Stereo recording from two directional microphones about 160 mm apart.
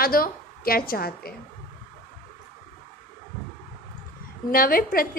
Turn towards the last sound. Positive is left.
turn(degrees=65)  # may be behind; listen again after turning